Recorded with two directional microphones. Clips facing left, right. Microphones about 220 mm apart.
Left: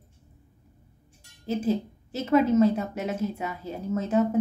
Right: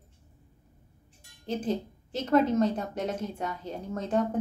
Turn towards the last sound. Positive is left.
turn(degrees=5)  # may be behind; listen again after turning